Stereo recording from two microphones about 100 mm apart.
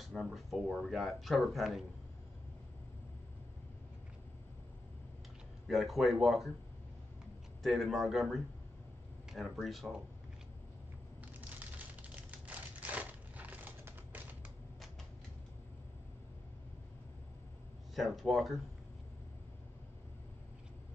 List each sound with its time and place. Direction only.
0.0 s speech: centre (ahead or behind)
5.7 s speech: centre (ahead or behind)
7.6 s speech: centre (ahead or behind)
11.4 s a sound: 15° right (ahead or behind)
17.9 s speech: centre (ahead or behind)